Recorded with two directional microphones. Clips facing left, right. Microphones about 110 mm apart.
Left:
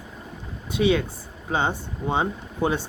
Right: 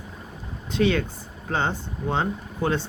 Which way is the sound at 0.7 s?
10° left (ahead or behind).